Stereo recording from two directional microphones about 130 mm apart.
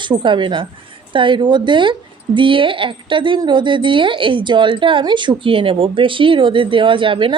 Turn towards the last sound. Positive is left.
turn(degrees=-40)  # may be behind; listen again after turning